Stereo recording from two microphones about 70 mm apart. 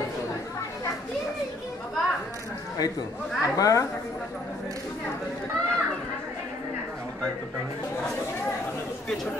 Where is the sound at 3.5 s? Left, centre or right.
Left.